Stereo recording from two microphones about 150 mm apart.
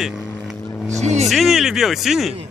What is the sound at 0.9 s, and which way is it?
Speech, 50° right (ahead or behind).